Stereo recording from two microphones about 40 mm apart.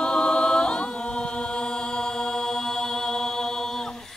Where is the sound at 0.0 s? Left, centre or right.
Left.